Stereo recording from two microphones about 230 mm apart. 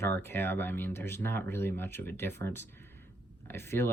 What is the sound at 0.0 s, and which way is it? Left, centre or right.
Speech, centre.